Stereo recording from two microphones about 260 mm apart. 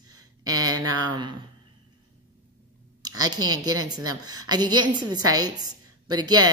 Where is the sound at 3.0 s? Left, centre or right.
Centre.